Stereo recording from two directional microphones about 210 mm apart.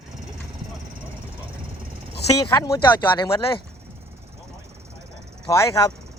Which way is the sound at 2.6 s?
20° left (ahead or behind).